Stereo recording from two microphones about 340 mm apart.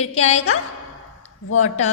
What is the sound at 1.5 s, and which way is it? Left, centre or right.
Speech, left.